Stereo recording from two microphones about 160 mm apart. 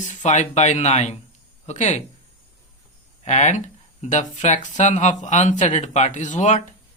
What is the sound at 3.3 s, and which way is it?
Speech, 45° left (ahead or behind).